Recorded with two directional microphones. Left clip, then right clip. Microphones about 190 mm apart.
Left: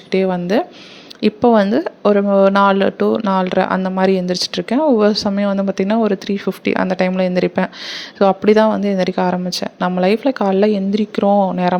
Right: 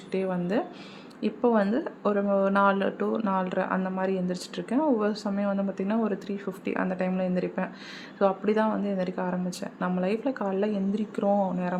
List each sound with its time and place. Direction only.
0.1 s speech: 35° left (ahead or behind)